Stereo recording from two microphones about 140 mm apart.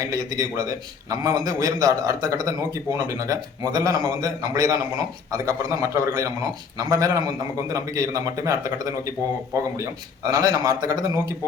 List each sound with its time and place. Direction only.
0.0 s a man's voice: 25° right (ahead or behind)